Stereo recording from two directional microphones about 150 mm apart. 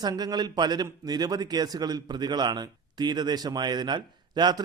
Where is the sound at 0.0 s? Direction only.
25° right (ahead or behind).